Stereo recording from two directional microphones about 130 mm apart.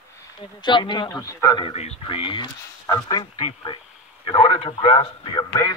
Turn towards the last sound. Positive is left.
turn(degrees=45)  # may be behind; listen again after turning